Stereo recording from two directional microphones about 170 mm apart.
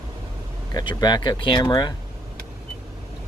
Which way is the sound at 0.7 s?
25° left (ahead or behind).